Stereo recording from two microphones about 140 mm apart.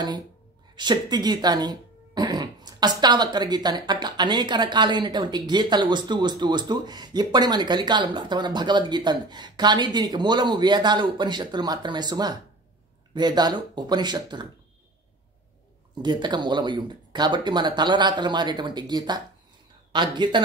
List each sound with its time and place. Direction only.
0.7 s speech: 30° right (ahead or behind)
16.0 s speech: 30° right (ahead or behind)